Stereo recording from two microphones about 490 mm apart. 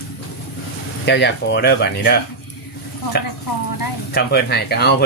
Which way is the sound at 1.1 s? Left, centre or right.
Left.